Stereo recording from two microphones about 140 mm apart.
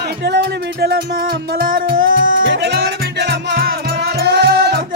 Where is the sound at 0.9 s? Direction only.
90° right.